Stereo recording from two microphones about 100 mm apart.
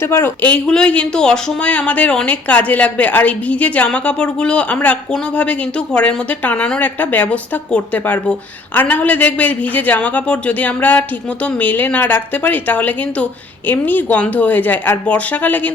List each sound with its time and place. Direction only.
0.0 s speech: 25° left (ahead or behind)